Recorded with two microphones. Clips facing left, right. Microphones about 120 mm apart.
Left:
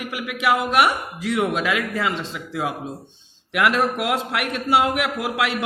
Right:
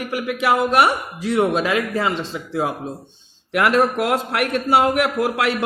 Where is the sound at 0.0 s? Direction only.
35° right (ahead or behind).